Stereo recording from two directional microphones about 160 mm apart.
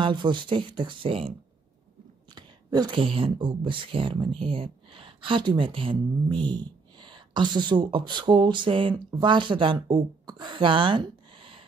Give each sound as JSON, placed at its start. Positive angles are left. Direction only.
{"t": 0.0, "sound": "speech", "side_deg": -30}
{"t": 2.3, "sound": "speech", "side_deg": -25}